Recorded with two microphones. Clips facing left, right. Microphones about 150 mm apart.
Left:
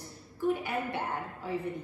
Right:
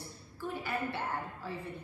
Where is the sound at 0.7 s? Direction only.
15° left (ahead or behind).